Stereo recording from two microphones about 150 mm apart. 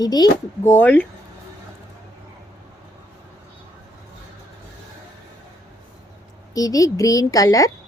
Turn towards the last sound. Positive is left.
turn(degrees=25)  # may be behind; listen again after turning